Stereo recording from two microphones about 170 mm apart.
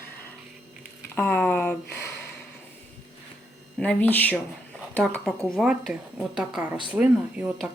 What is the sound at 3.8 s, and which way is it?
A woman's voice, 10° left (ahead or behind).